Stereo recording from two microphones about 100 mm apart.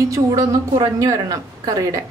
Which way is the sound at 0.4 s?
35° right (ahead or behind).